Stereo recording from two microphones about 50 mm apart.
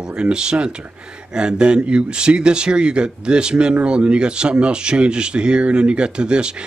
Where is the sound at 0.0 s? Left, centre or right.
Centre.